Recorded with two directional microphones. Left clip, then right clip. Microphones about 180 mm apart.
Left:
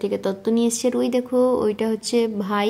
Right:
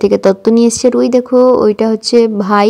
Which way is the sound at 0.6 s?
20° right (ahead or behind).